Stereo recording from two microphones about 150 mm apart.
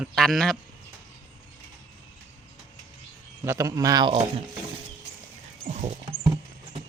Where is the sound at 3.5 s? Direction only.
20° right (ahead or behind).